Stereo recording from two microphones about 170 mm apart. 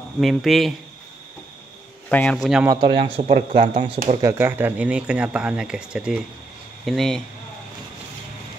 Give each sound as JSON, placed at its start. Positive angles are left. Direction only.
{"t": 0.2, "sound": "speech", "side_deg": 0}
{"t": 2.0, "sound": "speech", "side_deg": 10}
{"t": 2.3, "sound": "speech", "side_deg": 0}
{"t": 2.6, "sound": "speech", "side_deg": -25}
{"t": 3.0, "sound": "speech", "side_deg": -35}
{"t": 4.2, "sound": "speech", "side_deg": -15}